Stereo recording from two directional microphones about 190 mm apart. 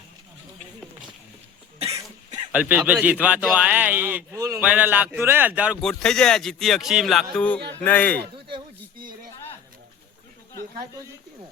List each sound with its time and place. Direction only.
2.5 s speech: 10° right (ahead or behind)
5.8 s speech: 5° left (ahead or behind)